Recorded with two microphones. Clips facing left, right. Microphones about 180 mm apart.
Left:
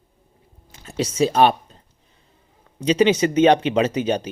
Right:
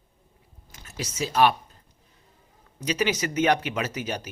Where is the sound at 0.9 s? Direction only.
30° left (ahead or behind).